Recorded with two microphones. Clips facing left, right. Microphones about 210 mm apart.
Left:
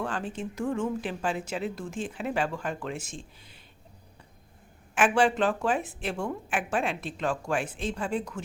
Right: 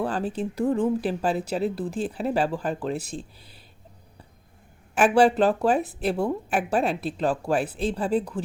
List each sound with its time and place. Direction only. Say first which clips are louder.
0.0 s speech: right 6 dB; 35° right (ahead or behind)
4.9 s speech: right 5 dB; 35° right (ahead or behind)